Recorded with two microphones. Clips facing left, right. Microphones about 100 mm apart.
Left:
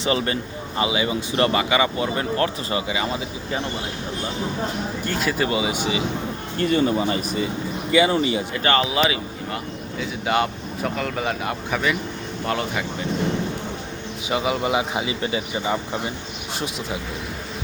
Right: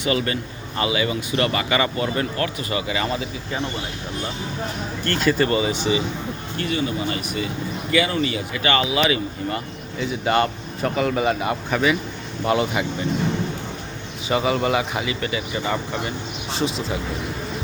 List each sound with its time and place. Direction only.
0.0 s speech: 30° left (ahead or behind)
2.4 s speech: 30° left (ahead or behind)
2.9 s speech: 15° left (ahead or behind)
5.0 s speech: 5° left (ahead or behind)
6.6 s speech: 40° left (ahead or behind)
7.9 s speech: 25° left (ahead or behind)
10.0 s speech: centre (ahead or behind)
14.3 s speech: 5° left (ahead or behind)
14.8 s speech: 20° left (ahead or behind)